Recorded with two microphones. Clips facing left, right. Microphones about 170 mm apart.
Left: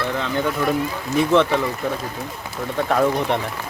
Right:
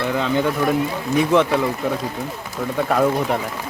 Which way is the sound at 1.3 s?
15° right (ahead or behind).